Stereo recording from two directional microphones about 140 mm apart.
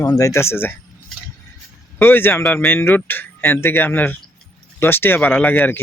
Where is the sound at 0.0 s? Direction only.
20° left (ahead or behind).